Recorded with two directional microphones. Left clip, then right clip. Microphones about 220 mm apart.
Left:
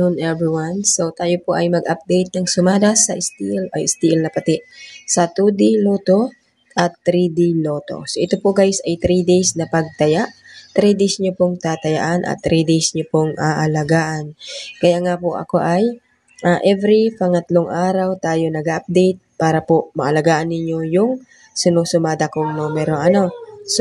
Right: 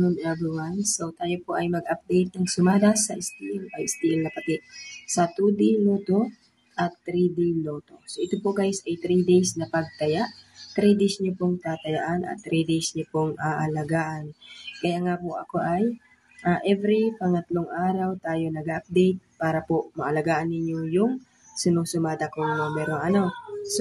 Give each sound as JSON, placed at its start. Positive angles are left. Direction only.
{"t": 0.0, "sound": "speech", "side_deg": 30}